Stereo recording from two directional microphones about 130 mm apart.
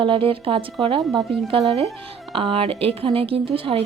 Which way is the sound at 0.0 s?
40° right (ahead or behind).